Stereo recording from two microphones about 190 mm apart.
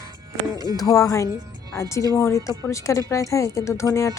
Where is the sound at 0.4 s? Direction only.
20° right (ahead or behind).